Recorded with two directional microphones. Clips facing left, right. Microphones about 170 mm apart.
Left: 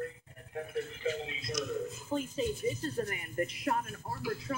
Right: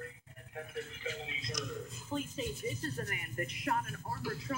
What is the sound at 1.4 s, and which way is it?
Speech, 10° left (ahead or behind).